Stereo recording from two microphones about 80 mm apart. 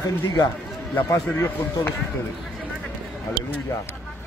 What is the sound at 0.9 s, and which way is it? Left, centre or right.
A man's voice, left.